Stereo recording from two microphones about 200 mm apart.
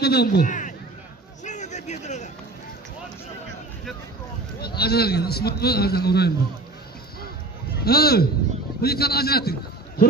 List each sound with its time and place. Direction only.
0.0 s a man's voice: 55° left (ahead or behind)
1.4 s a sound: 35° left (ahead or behind)
4.6 s a man's voice: 50° left (ahead or behind)
7.8 s a man's voice: 50° left (ahead or behind)